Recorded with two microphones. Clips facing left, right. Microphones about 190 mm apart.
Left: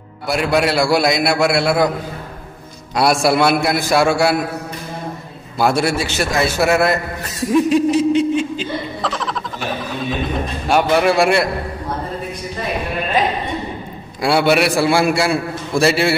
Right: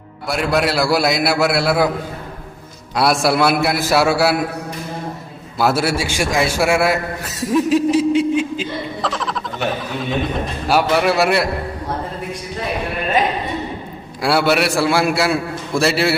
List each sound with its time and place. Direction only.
0.3 s a man's voice: centre (ahead or behind)
3.0 s a man's voice: centre (ahead or behind)
5.6 s a man's voice: 5° right (ahead or behind)
10.7 s a man's voice: 5° right (ahead or behind)
14.2 s a man's voice: centre (ahead or behind)